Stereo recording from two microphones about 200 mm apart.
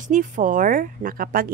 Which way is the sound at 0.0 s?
40° right (ahead or behind).